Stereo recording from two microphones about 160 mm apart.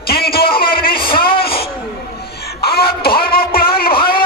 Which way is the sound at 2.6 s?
80° left.